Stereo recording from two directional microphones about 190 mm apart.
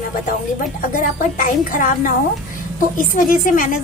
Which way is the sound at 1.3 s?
45° left (ahead or behind).